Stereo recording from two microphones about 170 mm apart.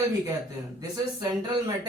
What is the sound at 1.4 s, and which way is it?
Speech, 25° right (ahead or behind).